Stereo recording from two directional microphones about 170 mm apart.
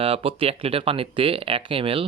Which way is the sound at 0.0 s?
35° right (ahead or behind).